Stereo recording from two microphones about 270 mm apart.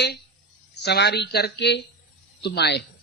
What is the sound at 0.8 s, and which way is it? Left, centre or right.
A woman's voice, left.